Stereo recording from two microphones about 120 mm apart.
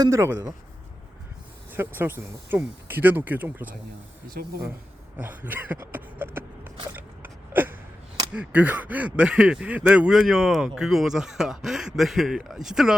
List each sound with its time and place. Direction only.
0.0 s speech: 25° right (ahead or behind)
1.7 s speech: 15° right (ahead or behind)
5.1 s a sound: 15° right (ahead or behind)
8.3 s speech: 10° right (ahead or behind)